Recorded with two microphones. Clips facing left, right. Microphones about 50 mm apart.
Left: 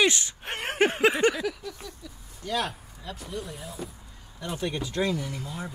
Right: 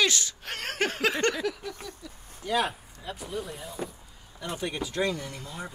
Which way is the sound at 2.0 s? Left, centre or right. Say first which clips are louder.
Even; centre.